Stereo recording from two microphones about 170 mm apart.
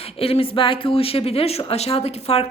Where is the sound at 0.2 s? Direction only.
35° left (ahead or behind).